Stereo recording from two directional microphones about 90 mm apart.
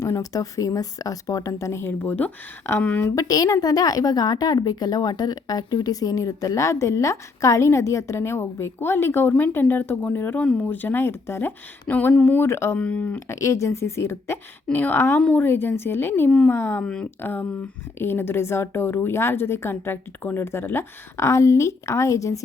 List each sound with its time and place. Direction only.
0.0 s a woman's voice: 40° left (ahead or behind); by 3.1 s 20° left (ahead or behind)
3.2 s a woman's voice: 40° left (ahead or behind)
12.7 s speech: 15° left (ahead or behind)
13.1 s a woman's voice: 30° left (ahead or behind)
16.8 s speech: 10° left (ahead or behind)
17.2 s a woman's voice: 25° left (ahead or behind)